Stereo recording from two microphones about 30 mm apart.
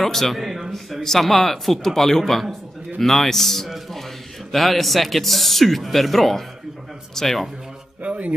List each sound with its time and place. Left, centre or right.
0.0 s speech: centre
0.4 s a man's voice: centre
1.2 s speech: centre
8.0 s a sound: right